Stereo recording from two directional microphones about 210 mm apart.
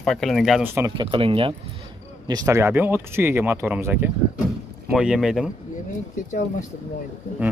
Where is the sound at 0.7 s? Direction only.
10° right (ahead or behind).